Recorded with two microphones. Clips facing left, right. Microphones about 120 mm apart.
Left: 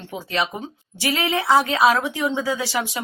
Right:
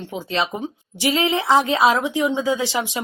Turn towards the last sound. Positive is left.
turn(degrees=-20)  # may be behind; listen again after turning